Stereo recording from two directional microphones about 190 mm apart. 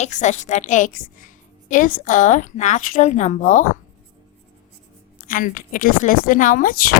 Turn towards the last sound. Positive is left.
turn(degrees=45)  # may be behind; listen again after turning